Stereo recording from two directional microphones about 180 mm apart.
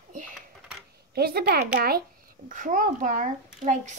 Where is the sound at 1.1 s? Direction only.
60° right (ahead or behind).